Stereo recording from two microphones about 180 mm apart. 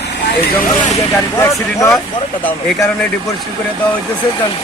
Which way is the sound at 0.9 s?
15° left (ahead or behind).